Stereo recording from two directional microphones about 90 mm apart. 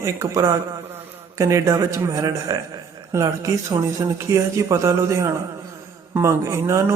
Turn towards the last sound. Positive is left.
turn(degrees=-30)  # may be behind; listen again after turning